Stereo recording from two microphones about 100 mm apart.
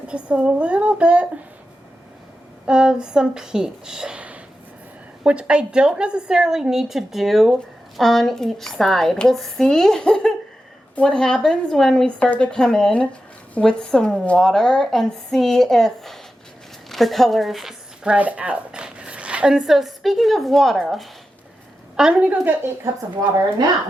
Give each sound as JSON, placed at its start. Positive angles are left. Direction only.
{"t": 0.1, "sound": "a woman's voice", "side_deg": -10}
{"t": 2.6, "sound": "a woman's voice", "side_deg": -10}